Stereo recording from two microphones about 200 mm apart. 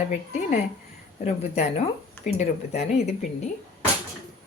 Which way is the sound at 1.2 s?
35° left (ahead or behind).